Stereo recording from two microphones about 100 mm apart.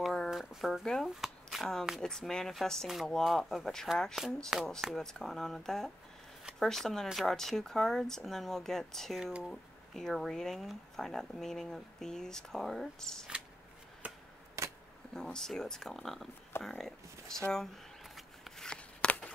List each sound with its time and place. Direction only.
0.1 s shuffling cards: centre (ahead or behind)
2.0 s speech: 5° left (ahead or behind)
14.0 s chop: 15° right (ahead or behind)
14.6 s a sound: 30° right (ahead or behind)
15.1 s speech: 5° left (ahead or behind)
17.5 s shuffling cards: 5° left (ahead or behind)